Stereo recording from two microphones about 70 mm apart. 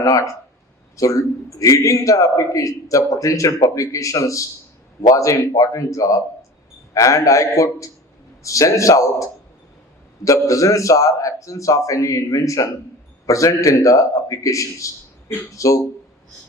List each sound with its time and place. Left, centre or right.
0.0 s a man's voice: left